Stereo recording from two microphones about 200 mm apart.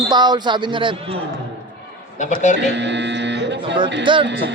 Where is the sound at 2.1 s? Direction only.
35° left (ahead or behind).